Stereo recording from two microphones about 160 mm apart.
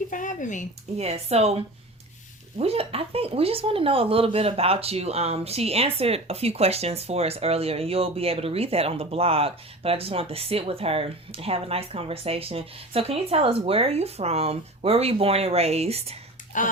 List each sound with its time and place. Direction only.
0.1 s a sound: 55° left (ahead or behind)
0.9 s speech: 40° right (ahead or behind)
2.6 s speech: 40° right (ahead or behind)
16.5 s speech: 55° left (ahead or behind)